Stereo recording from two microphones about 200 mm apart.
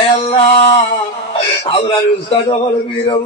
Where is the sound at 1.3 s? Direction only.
30° left (ahead or behind).